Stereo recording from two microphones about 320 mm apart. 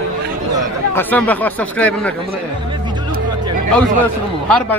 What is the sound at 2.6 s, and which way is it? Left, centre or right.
Music, centre.